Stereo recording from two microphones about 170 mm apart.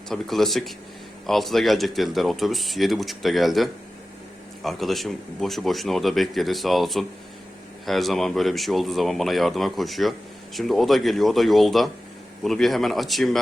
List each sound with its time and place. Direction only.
0.1 s speech: centre (ahead or behind)